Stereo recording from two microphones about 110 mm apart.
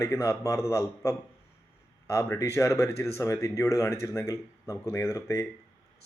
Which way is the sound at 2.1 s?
30° left (ahead or behind).